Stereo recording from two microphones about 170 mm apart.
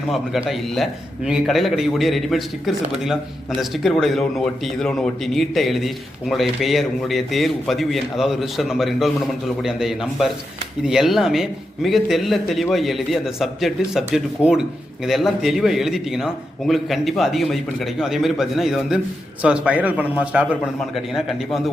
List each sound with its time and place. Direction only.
0.1 s a man's voice: 5° right (ahead or behind)